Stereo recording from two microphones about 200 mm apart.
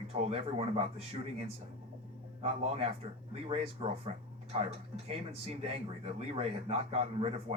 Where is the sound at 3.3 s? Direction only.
30° right (ahead or behind).